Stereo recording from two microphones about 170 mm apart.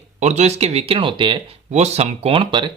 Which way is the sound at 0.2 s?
40° right (ahead or behind).